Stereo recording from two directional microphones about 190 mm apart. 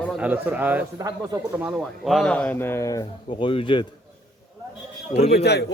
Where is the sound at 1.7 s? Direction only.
Centre (ahead or behind); by 3.9 s 25° left (ahead or behind).